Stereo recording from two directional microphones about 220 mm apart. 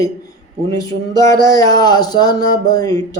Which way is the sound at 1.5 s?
15° left (ahead or behind).